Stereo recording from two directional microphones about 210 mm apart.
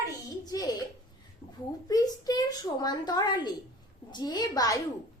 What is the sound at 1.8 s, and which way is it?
A woman's voice, 20° left (ahead or behind).